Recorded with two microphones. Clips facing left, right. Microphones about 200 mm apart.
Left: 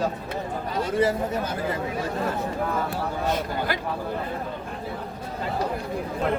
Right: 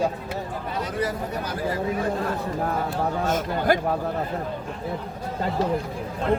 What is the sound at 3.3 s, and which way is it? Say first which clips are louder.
Speech: right 5 dB; 45° right (ahead or behind).